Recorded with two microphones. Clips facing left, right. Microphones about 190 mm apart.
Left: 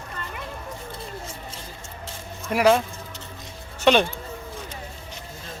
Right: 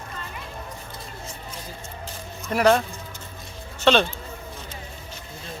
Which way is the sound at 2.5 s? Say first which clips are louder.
Even; 5° left (ahead or behind).